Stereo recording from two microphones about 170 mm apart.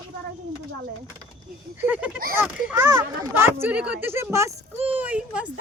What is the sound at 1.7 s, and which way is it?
Speech, 10° right (ahead or behind).